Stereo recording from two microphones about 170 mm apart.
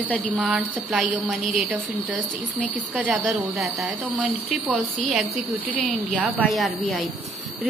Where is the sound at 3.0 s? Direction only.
Centre (ahead or behind).